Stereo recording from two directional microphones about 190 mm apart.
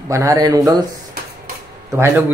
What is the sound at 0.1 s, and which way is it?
Speech, 15° right (ahead or behind).